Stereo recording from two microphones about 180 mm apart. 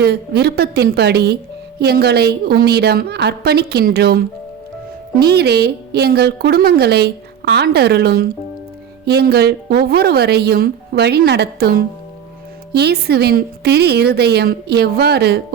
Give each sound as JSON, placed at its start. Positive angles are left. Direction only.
{"t": 0.0, "sound": "a woman's voice", "side_deg": -65}